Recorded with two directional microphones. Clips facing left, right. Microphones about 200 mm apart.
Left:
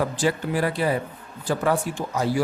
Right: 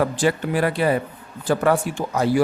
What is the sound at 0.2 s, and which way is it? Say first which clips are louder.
Speech: right 3 dB; 65° right (ahead or behind).